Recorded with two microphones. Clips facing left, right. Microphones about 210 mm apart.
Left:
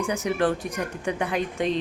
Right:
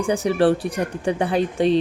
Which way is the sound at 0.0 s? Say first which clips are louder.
Right 6 dB; 30° right (ahead or behind).